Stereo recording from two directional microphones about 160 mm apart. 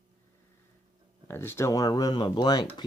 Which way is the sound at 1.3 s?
15° left (ahead or behind).